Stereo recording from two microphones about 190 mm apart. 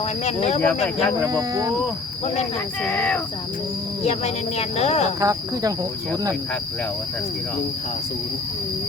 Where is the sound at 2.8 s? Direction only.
10° left (ahead or behind).